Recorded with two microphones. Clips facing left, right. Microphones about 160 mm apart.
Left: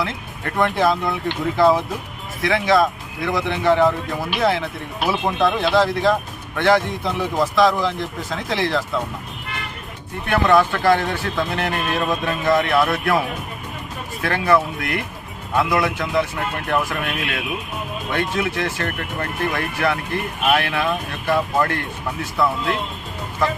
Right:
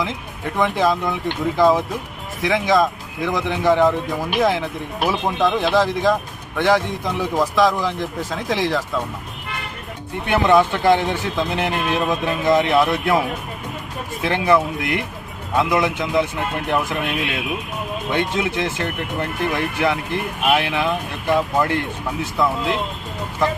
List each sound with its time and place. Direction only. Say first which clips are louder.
0.0 s speech: right 1 dB; 15° right (ahead or behind)
10.2 s a man's voice: right 1 dB; 20° right (ahead or behind)